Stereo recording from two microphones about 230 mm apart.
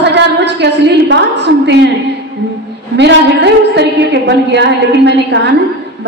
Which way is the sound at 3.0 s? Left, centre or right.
Right.